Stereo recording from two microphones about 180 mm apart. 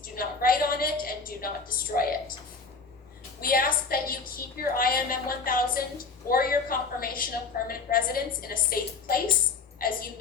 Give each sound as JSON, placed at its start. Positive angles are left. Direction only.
{"t": 0.0, "sound": "a woman's voice", "side_deg": 55}
{"t": 3.4, "sound": "a woman's voice", "side_deg": 55}